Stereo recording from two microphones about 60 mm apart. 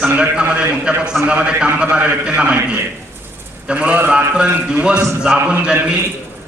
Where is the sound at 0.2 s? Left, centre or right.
Centre.